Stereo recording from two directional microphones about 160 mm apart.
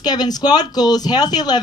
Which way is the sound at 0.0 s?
25° left (ahead or behind).